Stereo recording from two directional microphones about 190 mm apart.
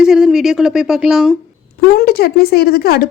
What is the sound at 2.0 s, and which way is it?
Speech, 55° left (ahead or behind).